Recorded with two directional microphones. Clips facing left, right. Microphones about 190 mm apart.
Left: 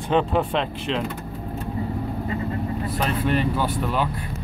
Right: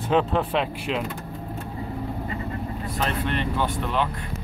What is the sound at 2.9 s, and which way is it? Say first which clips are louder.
Speech: left 3 dB; 5° left (ahead or behind).